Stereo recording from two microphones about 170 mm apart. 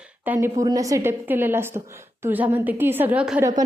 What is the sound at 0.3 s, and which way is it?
A woman's voice, 15° right (ahead or behind).